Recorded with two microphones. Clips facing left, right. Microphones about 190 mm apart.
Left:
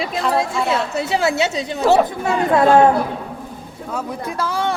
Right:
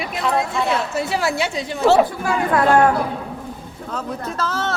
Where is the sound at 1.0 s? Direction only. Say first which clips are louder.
Left 3 dB; 25° left (ahead or behind).